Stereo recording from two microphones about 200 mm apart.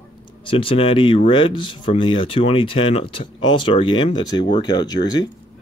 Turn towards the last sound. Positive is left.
turn(degrees=20)  # may be behind; listen again after turning